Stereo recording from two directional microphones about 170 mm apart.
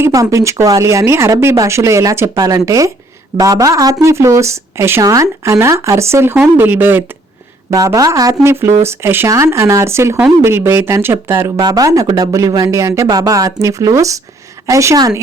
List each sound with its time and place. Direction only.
0.0 s a woman's voice: 20° right (ahead or behind)